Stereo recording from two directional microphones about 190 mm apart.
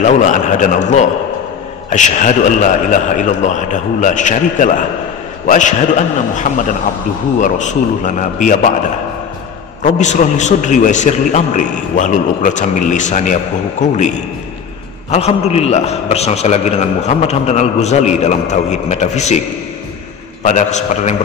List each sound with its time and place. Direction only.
0.0 s a man's voice: 40° left (ahead or behind)
9.8 s a man's voice: 40° left (ahead or behind)
20.4 s a man's voice: 40° left (ahead or behind)